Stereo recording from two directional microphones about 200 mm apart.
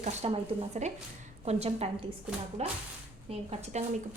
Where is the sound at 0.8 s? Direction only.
35° right (ahead or behind).